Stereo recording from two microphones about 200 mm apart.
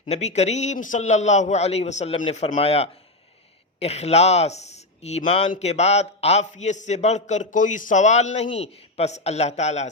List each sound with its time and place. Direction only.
0.0 s speech: 35° left (ahead or behind)